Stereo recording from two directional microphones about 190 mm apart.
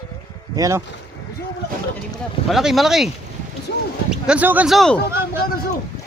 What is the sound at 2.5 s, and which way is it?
Speech, centre (ahead or behind).